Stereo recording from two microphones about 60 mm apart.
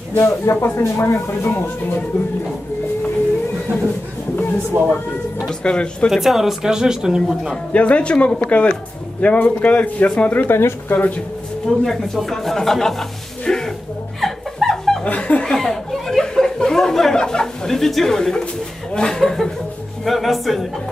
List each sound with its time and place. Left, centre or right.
0.2 s speech: left
5.5 s speech: centre
6.0 s speech: centre
7.7 s a man's voice: left
11.6 s speech: centre
13.5 s music: centre
14.2 s chuckle: centre
15.0 s speech: left
15.5 s a sound: centre
18.9 s speech: centre